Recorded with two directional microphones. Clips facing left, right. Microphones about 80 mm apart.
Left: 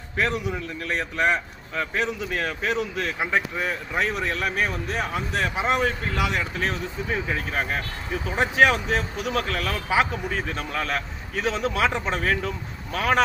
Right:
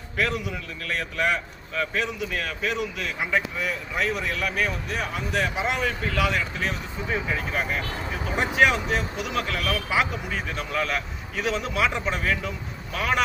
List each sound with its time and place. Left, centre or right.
0.2 s a man's voice: left